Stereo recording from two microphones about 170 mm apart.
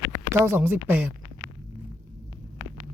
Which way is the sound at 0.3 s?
15° right (ahead or behind).